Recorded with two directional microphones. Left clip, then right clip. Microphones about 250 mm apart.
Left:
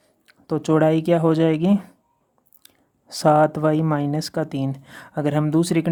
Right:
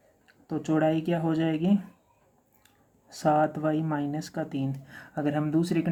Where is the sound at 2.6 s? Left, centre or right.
Left.